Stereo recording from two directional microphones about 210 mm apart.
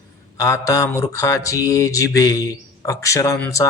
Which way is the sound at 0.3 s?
15° left (ahead or behind).